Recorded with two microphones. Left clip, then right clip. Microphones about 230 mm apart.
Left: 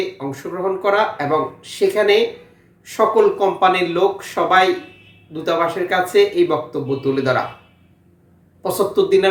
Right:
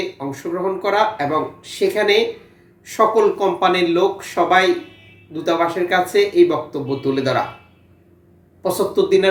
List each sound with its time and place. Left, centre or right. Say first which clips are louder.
0.2 s speech: right 1 dB; centre
8.6 s speech: left 1 dB; centre